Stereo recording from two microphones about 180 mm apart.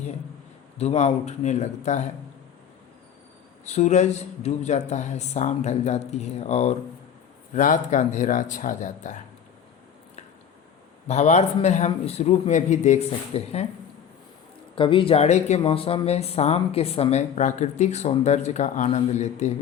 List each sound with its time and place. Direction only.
0.8 s speech: 35° left (ahead or behind)
3.7 s speech: 40° left (ahead or behind)
11.1 s speech: 40° left (ahead or behind)
14.8 s speech: 30° left (ahead or behind)